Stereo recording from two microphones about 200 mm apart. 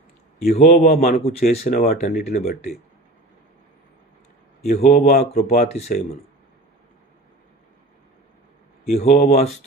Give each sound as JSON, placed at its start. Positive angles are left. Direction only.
{"t": 0.5, "sound": "speech", "side_deg": 35}
{"t": 0.9, "sound": "a man's voice", "side_deg": 45}
{"t": 1.2, "sound": "speech", "side_deg": 30}
{"t": 4.8, "sound": "speech", "side_deg": 40}
{"t": 8.8, "sound": "speech", "side_deg": 35}